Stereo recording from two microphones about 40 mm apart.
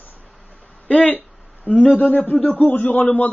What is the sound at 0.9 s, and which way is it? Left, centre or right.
A man's voice, left.